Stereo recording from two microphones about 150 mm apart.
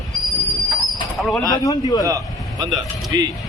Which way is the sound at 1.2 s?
Centre (ahead or behind).